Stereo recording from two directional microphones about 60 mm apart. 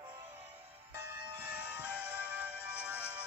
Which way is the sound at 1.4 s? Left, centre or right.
Right.